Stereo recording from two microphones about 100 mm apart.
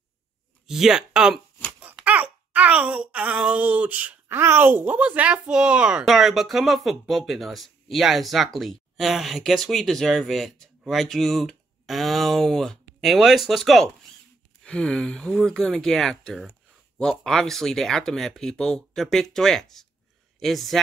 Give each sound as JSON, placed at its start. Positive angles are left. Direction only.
{"t": 0.7, "sound": "speech", "side_deg": -5}